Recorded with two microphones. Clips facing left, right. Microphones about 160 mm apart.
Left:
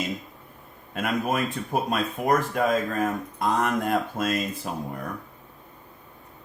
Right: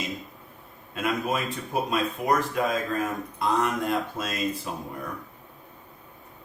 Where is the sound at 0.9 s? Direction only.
50° left (ahead or behind).